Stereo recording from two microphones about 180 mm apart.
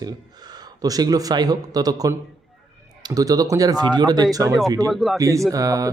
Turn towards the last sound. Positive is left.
turn(degrees=-20)  # may be behind; listen again after turning